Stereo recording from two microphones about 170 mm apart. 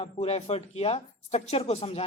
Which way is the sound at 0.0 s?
40° left (ahead or behind).